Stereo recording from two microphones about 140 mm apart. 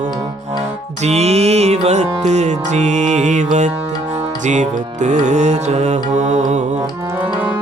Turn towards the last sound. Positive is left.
turn(degrees=-55)  # may be behind; listen again after turning